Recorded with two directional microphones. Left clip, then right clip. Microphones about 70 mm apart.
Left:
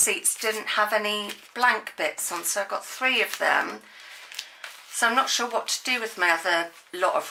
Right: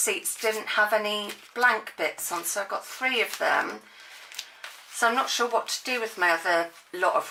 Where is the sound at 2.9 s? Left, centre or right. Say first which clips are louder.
Left 3 dB; left.